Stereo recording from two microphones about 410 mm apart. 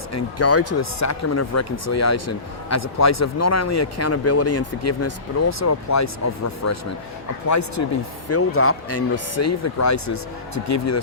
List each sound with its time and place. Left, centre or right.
0.1 s speech: left
8.3 s speech: left